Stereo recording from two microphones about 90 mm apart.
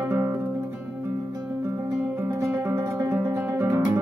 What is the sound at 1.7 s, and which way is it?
Music, 35° right (ahead or behind).